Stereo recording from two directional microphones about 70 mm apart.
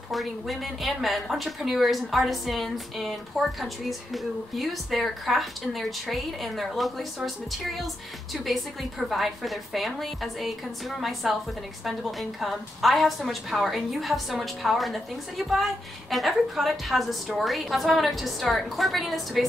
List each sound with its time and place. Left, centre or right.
0.1 s a woman's voice: centre